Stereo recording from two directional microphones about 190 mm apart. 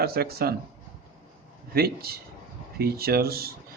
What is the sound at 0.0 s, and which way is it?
Speech, 55° right (ahead or behind).